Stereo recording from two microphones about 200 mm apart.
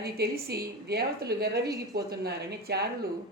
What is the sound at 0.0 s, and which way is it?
Speech, 50° right (ahead or behind).